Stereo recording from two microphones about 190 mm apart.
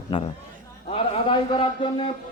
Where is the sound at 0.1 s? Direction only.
25° left (ahead or behind).